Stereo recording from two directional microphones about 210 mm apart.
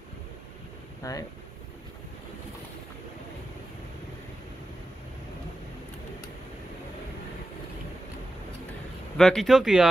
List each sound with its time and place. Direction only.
1.0 s speech: 15° left (ahead or behind)
9.1 s speech: centre (ahead or behind)